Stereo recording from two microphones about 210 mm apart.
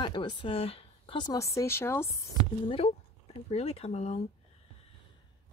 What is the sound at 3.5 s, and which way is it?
Speech, 30° left (ahead or behind).